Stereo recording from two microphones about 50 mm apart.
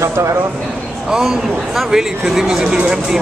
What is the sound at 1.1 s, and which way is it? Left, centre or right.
Speech, centre.